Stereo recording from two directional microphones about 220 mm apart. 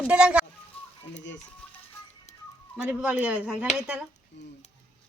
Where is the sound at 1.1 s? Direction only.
55° left (ahead or behind).